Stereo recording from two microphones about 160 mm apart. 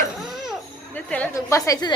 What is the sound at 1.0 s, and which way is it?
Speech, 10° left (ahead or behind).